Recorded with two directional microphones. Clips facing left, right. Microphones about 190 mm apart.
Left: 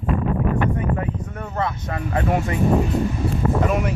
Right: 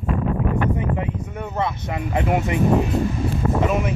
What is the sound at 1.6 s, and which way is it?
Speech, 15° right (ahead or behind).